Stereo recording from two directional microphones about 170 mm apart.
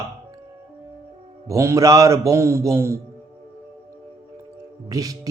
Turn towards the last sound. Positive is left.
turn(degrees=-20)  # may be behind; listen again after turning